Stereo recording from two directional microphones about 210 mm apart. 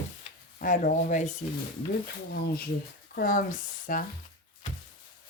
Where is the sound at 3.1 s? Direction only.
45° left (ahead or behind).